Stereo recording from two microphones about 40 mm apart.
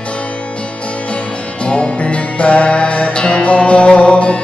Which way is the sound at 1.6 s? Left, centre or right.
Left.